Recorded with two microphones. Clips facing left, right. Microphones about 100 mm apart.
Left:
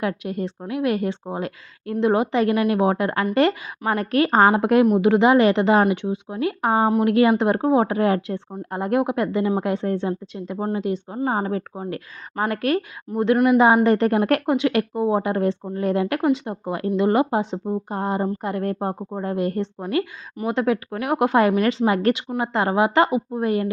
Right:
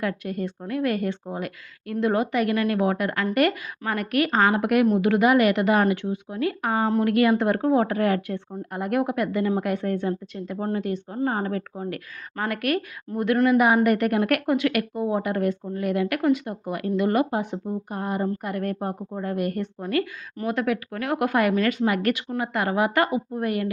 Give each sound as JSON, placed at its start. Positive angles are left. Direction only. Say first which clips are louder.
{"t": 0.0, "sound": "a woman's voice", "louder": "left 2 dB", "side_deg": 20}
{"t": 4.5, "sound": "a woman's voice", "louder": "left 3 dB", "side_deg": 25}